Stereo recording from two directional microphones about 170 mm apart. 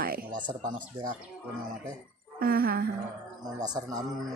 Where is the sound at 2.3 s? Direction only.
60° right (ahead or behind).